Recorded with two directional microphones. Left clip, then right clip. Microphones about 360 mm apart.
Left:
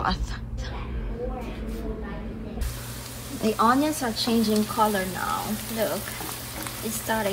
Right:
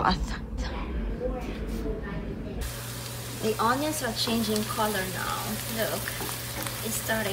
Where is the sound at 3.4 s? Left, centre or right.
Centre.